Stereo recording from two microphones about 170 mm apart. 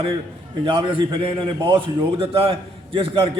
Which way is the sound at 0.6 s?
30° right (ahead or behind).